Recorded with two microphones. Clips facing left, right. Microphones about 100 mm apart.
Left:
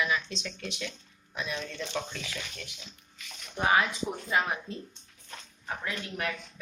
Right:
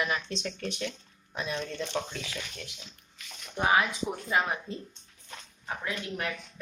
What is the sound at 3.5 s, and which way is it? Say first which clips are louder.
Speech: even; 10° right (ahead or behind).